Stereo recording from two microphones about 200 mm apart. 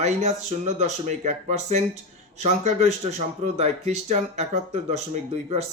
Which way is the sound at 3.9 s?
35° right (ahead or behind).